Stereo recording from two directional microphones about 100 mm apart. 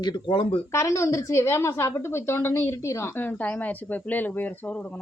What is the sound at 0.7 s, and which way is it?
A woman's voice, 30° left (ahead or behind).